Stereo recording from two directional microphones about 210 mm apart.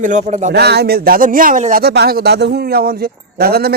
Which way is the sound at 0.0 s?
35° right (ahead or behind).